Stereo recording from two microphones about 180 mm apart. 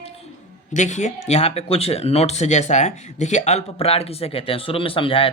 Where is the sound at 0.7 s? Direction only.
40° left (ahead or behind).